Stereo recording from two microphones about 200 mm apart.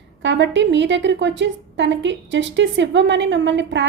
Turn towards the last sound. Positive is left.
turn(degrees=-65)  # may be behind; listen again after turning